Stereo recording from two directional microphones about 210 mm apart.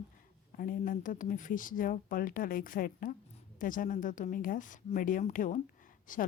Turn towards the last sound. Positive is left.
turn(degrees=40)  # may be behind; listen again after turning